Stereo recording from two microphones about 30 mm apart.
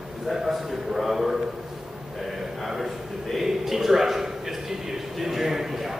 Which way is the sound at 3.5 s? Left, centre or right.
Centre.